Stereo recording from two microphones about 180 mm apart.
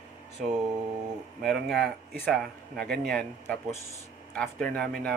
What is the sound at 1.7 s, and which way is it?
Speech, 65° right (ahead or behind).